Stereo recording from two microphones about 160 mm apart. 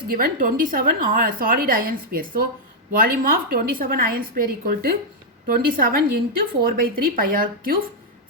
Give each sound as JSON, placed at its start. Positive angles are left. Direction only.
{"t": 0.1, "sound": "a woman's voice", "side_deg": -60}